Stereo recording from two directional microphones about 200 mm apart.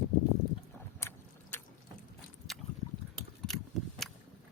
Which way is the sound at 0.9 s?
10° left (ahead or behind).